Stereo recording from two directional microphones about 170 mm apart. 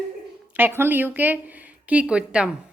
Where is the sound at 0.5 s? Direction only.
10° right (ahead or behind).